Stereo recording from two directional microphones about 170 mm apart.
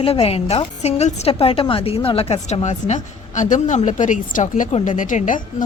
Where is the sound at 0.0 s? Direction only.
35° left (ahead or behind).